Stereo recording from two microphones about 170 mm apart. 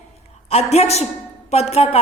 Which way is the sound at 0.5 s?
40° left (ahead or behind).